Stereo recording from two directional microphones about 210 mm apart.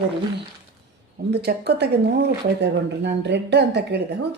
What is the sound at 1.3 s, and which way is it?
Speech, 50° right (ahead or behind).